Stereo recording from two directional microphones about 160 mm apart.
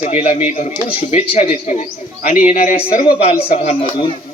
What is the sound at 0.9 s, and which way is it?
Speech, 40° left (ahead or behind).